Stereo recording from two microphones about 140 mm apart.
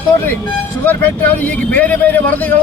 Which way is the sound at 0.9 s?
15° left (ahead or behind).